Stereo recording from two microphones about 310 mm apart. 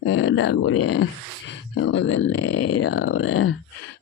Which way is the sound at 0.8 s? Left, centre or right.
Left.